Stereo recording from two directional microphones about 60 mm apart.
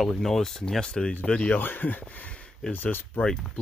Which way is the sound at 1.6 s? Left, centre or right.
Left.